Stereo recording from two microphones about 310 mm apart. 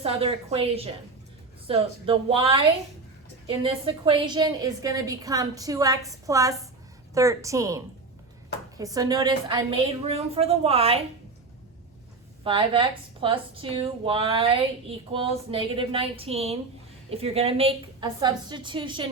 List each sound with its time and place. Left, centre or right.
0.0 s a woman's voice: centre
12.5 s a woman's voice: centre